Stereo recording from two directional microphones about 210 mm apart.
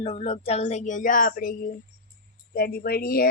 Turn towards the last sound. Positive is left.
turn(degrees=45)  # may be behind; listen again after turning